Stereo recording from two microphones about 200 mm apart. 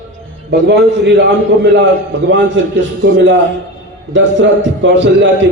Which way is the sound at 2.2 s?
65° right (ahead or behind).